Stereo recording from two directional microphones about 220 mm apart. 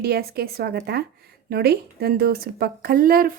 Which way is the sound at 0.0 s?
45° right (ahead or behind).